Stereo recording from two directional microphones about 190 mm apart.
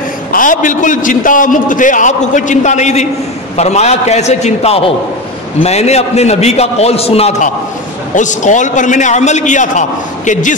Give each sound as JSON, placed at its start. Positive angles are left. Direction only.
{"t": 0.3, "sound": "a man's voice", "side_deg": 45}